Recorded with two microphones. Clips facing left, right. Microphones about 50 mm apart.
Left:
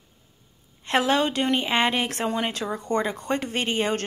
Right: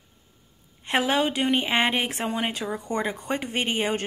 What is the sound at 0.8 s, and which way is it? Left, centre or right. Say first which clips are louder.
A woman's voice: left 1 dB; centre.